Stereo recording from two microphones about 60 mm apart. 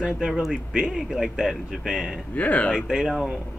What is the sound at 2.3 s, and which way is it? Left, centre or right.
Speech, left.